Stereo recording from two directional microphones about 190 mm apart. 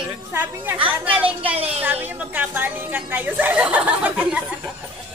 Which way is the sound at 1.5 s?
30° right (ahead or behind).